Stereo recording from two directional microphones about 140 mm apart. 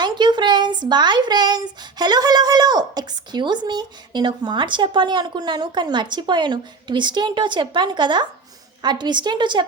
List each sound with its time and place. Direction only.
0.0 s speech: 30° right (ahead or behind)